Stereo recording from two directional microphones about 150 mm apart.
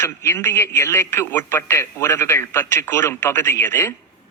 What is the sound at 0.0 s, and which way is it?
A man's voice, 15° left (ahead or behind).